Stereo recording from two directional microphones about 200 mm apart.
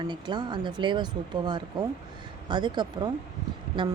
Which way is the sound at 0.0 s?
20° right (ahead or behind).